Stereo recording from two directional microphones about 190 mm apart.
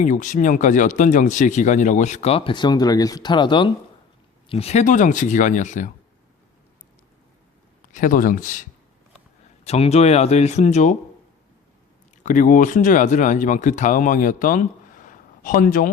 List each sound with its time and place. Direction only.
0.0 s speech: 40° left (ahead or behind)
7.9 s speech: 45° left (ahead or behind)
9.6 s speech: 35° left (ahead or behind)
12.2 s speech: 45° left (ahead or behind)